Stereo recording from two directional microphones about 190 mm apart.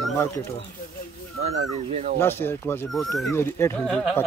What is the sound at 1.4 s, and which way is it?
Speech, 35° right (ahead or behind).